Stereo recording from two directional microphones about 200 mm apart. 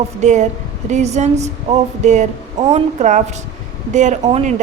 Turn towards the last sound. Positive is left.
turn(degrees=-35)  # may be behind; listen again after turning